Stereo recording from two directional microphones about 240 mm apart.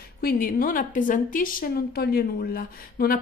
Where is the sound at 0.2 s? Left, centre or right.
Left.